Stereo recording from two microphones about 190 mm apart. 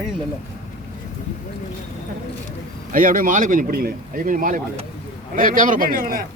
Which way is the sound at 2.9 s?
45° right (ahead or behind).